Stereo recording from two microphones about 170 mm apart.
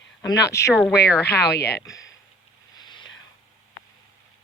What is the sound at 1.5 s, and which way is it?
Speech, 70° left (ahead or behind).